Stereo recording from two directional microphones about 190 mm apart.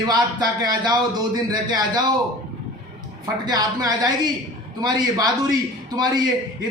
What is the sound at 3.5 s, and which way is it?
A man's voice, 20° right (ahead or behind).